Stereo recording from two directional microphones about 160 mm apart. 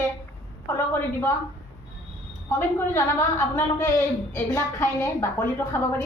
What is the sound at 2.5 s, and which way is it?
A woman's voice, 15° left (ahead or behind).